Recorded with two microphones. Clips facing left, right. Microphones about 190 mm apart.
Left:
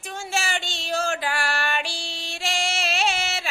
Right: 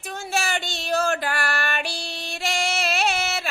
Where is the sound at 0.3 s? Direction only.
60° right (ahead or behind).